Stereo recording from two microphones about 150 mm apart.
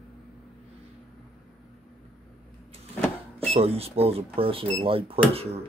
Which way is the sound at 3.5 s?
40° right (ahead or behind).